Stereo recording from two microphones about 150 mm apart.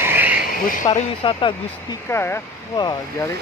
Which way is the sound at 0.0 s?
15° right (ahead or behind).